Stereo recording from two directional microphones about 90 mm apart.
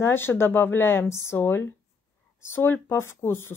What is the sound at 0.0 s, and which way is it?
Speech, 25° left (ahead or behind).